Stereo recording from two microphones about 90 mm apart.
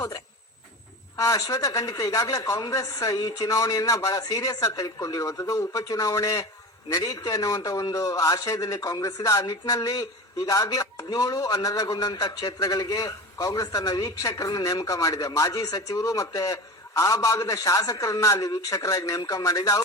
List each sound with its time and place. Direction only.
1.1 s a man's voice: 40° left (ahead or behind)